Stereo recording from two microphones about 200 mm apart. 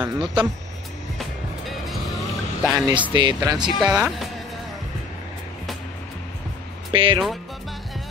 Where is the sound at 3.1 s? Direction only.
20° right (ahead or behind).